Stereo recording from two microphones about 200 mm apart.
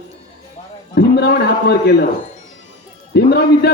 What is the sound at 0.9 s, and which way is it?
Speech, 55° left (ahead or behind).